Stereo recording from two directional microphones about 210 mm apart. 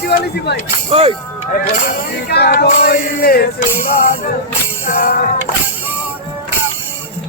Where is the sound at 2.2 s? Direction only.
50° left (ahead or behind).